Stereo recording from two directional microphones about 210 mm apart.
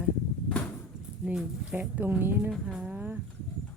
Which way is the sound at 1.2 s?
5° right (ahead or behind).